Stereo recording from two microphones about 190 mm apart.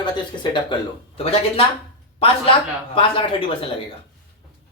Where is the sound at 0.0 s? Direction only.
25° left (ahead or behind).